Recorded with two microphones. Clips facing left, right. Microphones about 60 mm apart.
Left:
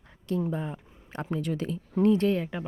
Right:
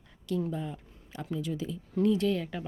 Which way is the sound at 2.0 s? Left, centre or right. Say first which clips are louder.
Left 3 dB; left.